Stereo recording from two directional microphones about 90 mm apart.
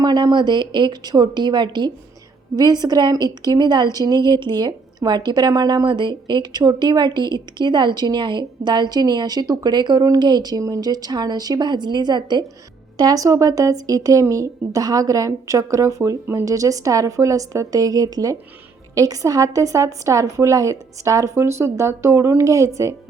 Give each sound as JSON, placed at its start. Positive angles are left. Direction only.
{"t": 0.0, "sound": "a woman's voice", "side_deg": -50}
{"t": 13.0, "sound": "speech", "side_deg": -45}